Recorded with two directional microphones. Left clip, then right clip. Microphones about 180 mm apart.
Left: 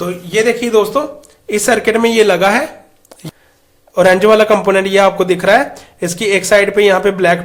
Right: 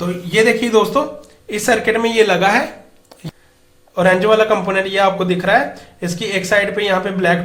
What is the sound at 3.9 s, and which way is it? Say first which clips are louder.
A man's voice: left 4 dB; 35° left (ahead or behind).